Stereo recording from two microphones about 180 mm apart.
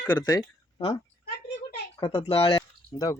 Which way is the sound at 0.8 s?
35° left (ahead or behind).